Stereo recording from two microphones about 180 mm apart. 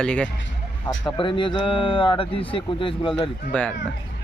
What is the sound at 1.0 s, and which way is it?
Speech, 25° left (ahead or behind).